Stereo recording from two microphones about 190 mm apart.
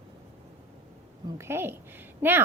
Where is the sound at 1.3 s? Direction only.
15° right (ahead or behind).